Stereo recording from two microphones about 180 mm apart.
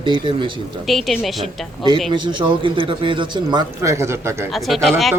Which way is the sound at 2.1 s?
25° right (ahead or behind).